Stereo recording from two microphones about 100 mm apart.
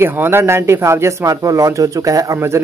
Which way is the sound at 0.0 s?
25° right (ahead or behind).